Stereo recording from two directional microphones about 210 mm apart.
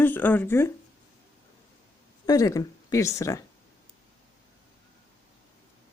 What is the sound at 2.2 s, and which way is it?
Speech, 15° left (ahead or behind).